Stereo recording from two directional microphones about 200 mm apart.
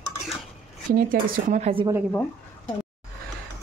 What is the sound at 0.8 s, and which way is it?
Speech, 45° right (ahead or behind).